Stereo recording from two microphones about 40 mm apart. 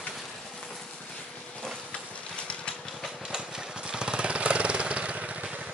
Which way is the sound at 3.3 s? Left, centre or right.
Centre.